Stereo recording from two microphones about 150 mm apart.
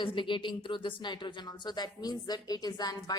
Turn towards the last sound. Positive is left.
turn(degrees=25)  # may be behind; listen again after turning